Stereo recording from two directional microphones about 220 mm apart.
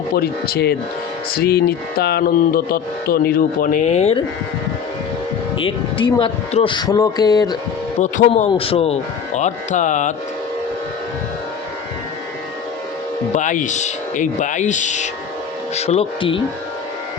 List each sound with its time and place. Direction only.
0.2 s music: 45° left (ahead or behind)
5.5 s speech: 25° left (ahead or behind)
7.9 s speech: 30° left (ahead or behind)
13.3 s speech: 35° left (ahead or behind)